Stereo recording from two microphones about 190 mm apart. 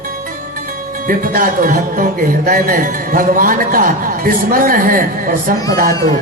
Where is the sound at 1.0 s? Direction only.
45° right (ahead or behind).